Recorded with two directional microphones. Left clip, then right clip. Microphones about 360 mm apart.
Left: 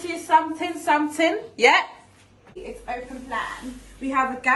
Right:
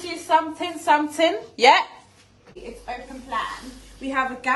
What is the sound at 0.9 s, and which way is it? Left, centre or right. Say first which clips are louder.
Speech: right 2 dB; right.